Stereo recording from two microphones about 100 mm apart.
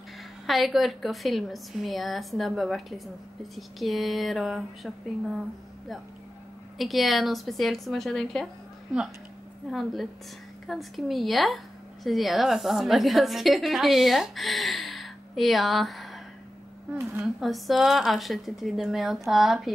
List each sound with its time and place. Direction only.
0.5 s a woman's voice: centre (ahead or behind)
6.8 s a woman's voice: centre (ahead or behind)
9.7 s a woman's voice: centre (ahead or behind)
16.9 s a woman's voice: 25° right (ahead or behind)
17.4 s a woman's voice: centre (ahead or behind)